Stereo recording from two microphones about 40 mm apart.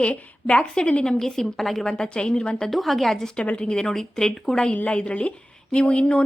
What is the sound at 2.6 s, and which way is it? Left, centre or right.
Speech, centre.